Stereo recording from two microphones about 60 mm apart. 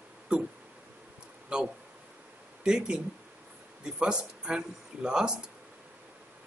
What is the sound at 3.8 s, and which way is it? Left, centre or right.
Speech, centre.